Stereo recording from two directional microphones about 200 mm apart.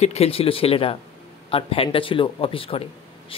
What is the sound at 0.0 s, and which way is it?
Speech, 30° left (ahead or behind).